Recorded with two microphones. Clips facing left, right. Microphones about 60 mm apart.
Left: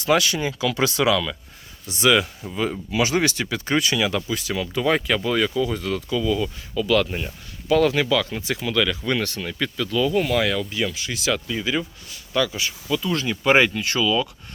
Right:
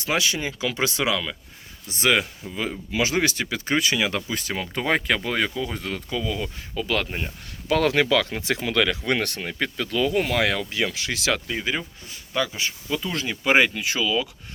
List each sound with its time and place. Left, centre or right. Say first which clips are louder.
0.0 s speech: left 4 dB; centre
1.9 s speech: left 3 dB; right
2.4 s speech: left 2 dB; centre
2.9 s speech: left 1 dB; right
7.7 s speech: left 1 dB; right
11.3 s speech: left 1 dB; right
11.7 s speech: left 3 dB; right
13.1 s speech: left 2 dB; centre